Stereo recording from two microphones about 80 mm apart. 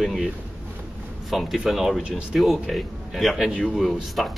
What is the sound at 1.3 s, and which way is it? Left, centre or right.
Speech, centre.